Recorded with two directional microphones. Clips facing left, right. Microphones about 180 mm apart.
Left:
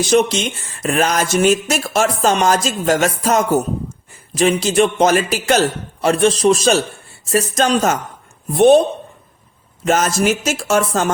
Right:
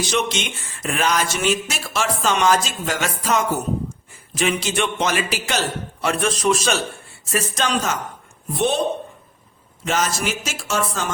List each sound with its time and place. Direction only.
0.1 s a man's voice: 40° left (ahead or behind)
9.8 s speech: 45° left (ahead or behind)